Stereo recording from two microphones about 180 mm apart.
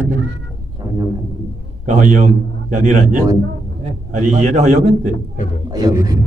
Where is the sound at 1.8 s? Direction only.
45° right (ahead or behind).